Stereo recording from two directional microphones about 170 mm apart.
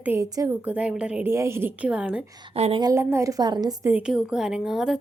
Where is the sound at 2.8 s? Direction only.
15° right (ahead or behind).